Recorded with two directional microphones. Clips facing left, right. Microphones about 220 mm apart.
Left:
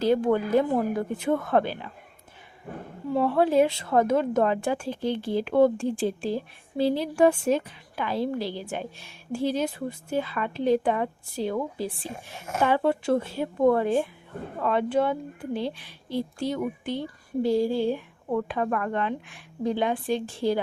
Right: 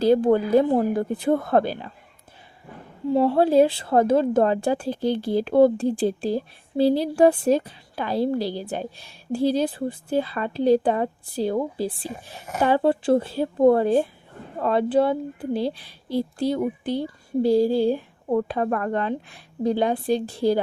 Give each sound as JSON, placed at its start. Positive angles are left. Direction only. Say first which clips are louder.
{"t": 0.0, "sound": "a woman's voice", "louder": "right 4 dB", "side_deg": -35}
{"t": 3.1, "sound": "a woman's voice", "louder": "right 4 dB", "side_deg": -30}